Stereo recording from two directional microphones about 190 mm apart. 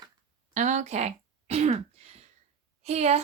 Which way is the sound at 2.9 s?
35° right (ahead or behind).